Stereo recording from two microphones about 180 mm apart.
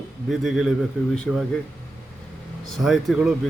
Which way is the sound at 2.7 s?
Centre (ahead or behind).